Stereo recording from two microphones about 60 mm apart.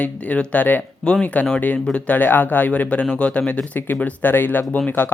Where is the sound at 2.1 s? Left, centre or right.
Left.